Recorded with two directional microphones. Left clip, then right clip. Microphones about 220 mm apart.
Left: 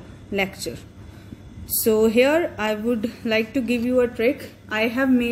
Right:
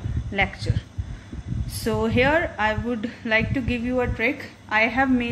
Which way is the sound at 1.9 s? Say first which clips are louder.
Left 4 dB; 30° left (ahead or behind).